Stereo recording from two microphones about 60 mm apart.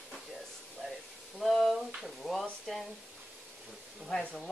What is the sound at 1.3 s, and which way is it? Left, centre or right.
Speech, centre.